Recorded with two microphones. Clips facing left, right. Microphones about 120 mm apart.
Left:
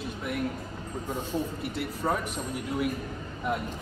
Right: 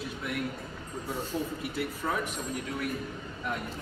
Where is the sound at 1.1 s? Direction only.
Centre (ahead or behind).